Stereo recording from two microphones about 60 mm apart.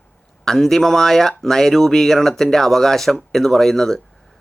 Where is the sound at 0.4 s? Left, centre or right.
Centre.